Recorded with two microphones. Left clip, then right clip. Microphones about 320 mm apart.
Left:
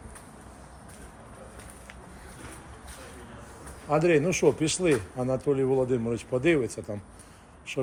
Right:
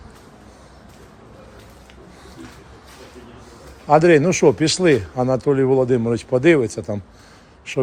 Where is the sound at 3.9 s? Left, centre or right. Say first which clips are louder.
Right 10 dB; right.